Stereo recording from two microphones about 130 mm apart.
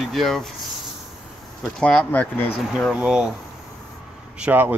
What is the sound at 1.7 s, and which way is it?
Speech, 5° left (ahead or behind).